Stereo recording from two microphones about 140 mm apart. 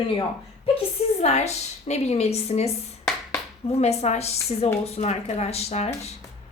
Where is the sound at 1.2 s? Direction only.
50° left (ahead or behind).